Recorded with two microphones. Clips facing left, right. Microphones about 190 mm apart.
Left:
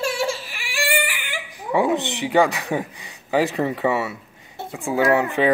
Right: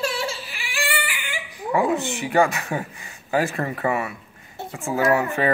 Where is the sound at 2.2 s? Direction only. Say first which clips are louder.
Left 2 dB; 15° left (ahead or behind).